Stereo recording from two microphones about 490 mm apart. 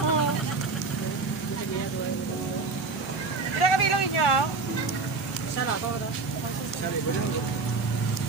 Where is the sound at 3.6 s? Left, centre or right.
Left.